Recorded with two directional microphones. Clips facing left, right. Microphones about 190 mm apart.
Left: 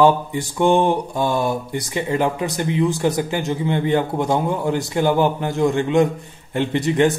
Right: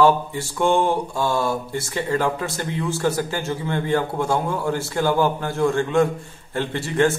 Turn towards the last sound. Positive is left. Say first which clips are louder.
# left 3 dB
turn(degrees=20)  # may be behind; listen again after turning